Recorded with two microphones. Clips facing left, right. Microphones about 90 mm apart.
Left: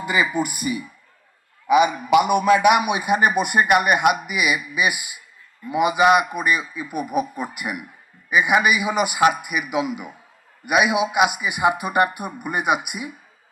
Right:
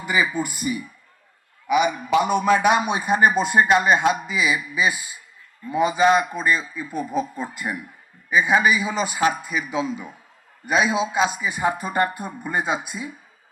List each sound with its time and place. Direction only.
0.6 s a man's voice: 15° left (ahead or behind)
2.3 s a man's voice: 60° left (ahead or behind)
2.6 s a man's voice: 15° left (ahead or behind)
3.1 s speech: 70° left (ahead or behind)
3.3 s a man's voice: 15° left (ahead or behind)